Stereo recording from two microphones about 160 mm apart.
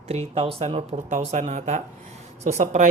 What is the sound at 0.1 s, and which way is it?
Speech, 40° right (ahead or behind).